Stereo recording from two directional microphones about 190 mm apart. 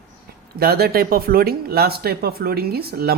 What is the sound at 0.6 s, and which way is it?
A woman's voice, 55° right (ahead or behind).